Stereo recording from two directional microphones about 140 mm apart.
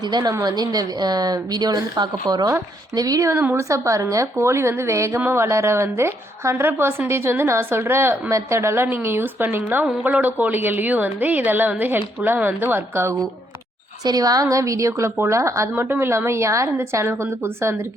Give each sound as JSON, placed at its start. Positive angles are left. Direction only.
{"t": 0.1, "sound": "a woman's voice", "side_deg": -30}